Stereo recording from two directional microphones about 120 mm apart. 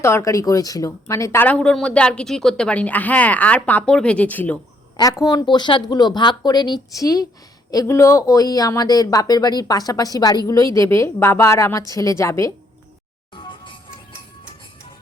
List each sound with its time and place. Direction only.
0.0 s speech: 20° left (ahead or behind)
4.9 s speech: 30° left (ahead or behind)
13.3 s music: 45° left (ahead or behind)